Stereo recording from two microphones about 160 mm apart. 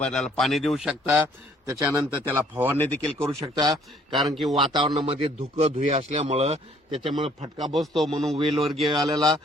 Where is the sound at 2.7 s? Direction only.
10° left (ahead or behind).